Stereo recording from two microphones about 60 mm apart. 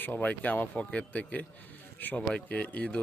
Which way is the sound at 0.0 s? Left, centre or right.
Left.